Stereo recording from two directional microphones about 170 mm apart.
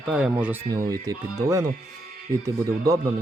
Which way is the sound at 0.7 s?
20° right (ahead or behind).